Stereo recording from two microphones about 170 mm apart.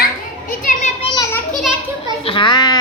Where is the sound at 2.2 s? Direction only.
30° left (ahead or behind).